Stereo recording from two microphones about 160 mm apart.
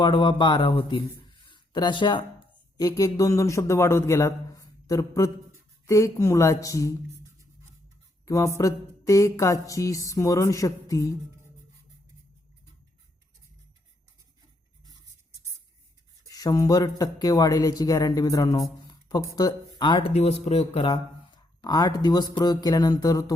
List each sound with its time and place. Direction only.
0.0 s mantra: 30° left (ahead or behind)
0.9 s speech: 30° left (ahead or behind)
2.7 s mantra: 20° left (ahead or behind)
8.2 s mantra: 20° left (ahead or behind)
16.3 s mantra: 25° left (ahead or behind)
19.4 s speech: 25° left (ahead or behind)
21.6 s mantra: 25° left (ahead or behind)